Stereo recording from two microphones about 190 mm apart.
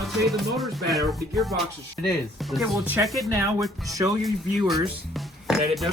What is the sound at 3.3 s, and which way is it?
Speech, 15° right (ahead or behind).